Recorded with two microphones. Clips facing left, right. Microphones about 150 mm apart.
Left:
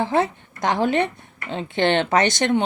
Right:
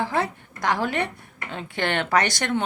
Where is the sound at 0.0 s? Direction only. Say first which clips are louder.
Left 4 dB; 20° left (ahead or behind).